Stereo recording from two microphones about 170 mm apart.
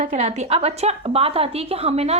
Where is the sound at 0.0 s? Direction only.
40° right (ahead or behind).